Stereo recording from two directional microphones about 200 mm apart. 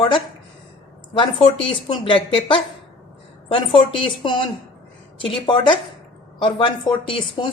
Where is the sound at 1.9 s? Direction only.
25° left (ahead or behind).